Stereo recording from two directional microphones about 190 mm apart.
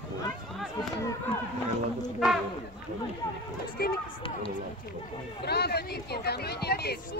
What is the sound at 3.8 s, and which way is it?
Speech, 55° left (ahead or behind).